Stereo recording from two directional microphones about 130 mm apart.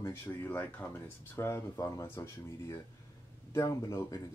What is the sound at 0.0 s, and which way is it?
Speech, 20° left (ahead or behind).